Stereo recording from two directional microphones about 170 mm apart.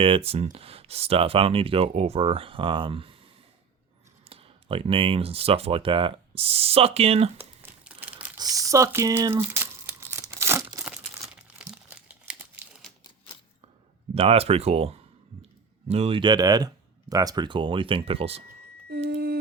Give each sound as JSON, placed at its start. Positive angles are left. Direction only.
{"t": 0.0, "sound": "speech", "side_deg": -35}
{"t": 4.3, "sound": "speech", "side_deg": -35}
{"t": 7.3, "sound": "crumpling", "side_deg": -10}
{"t": 8.4, "sound": "crumpling", "side_deg": -20}
{"t": 11.2, "sound": "crumpling", "side_deg": 0}
{"t": 14.1, "sound": "speech", "side_deg": -35}
{"t": 18.4, "sound": "a sound", "side_deg": -70}
{"t": 19.1, "sound": "music", "side_deg": -60}